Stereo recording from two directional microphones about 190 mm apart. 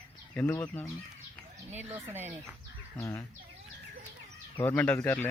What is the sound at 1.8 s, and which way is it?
Speech, 10° right (ahead or behind).